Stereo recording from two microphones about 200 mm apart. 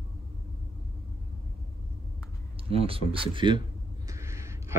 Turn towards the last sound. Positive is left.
turn(degrees=-15)  # may be behind; listen again after turning